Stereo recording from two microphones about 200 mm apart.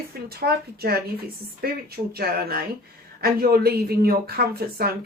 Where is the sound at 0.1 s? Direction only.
50° right (ahead or behind).